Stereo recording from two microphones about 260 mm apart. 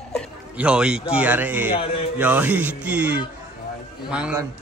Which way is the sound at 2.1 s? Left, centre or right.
Centre.